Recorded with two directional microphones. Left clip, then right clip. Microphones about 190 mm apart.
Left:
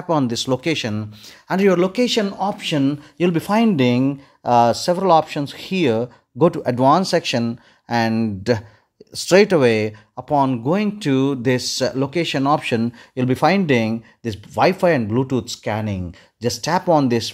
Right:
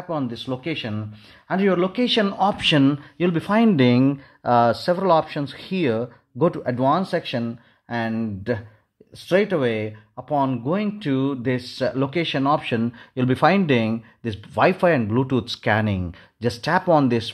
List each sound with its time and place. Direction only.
0.1 s speech: 45° left (ahead or behind); by 2.0 s 30° left (ahead or behind)
2.0 s speech: 15° left (ahead or behind)
2.3 s speech: 5° right (ahead or behind)
3.2 s speech: 15° left (ahead or behind); by 4.2 s centre (ahead or behind)
4.4 s speech: 10° left (ahead or behind); by 11.9 s 30° left (ahead or behind)
11.9 s speech: 15° left (ahead or behind)
12.8 s speech: 10° left (ahead or behind)
15.4 s speech: centre (ahead or behind)